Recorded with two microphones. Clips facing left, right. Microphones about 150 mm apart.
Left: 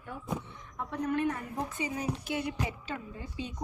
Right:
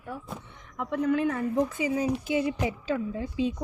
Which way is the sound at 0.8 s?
90° right.